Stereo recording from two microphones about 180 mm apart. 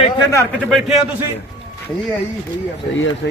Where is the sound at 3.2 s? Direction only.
90° left.